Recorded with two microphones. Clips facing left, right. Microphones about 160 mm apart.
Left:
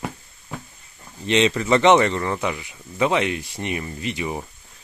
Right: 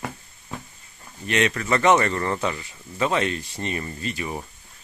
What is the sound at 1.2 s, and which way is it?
Speech, 25° left (ahead or behind).